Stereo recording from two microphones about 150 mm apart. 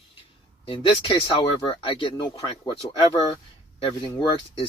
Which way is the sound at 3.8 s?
35° left (ahead or behind).